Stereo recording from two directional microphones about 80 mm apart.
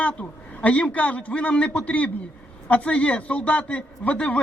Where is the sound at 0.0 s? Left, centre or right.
Centre.